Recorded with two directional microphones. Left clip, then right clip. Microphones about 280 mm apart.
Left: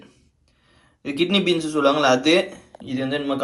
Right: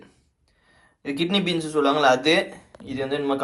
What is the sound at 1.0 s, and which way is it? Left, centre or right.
A man's voice, centre.